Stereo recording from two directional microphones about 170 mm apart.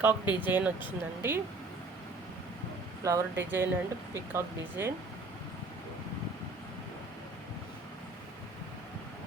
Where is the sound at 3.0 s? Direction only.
20° right (ahead or behind).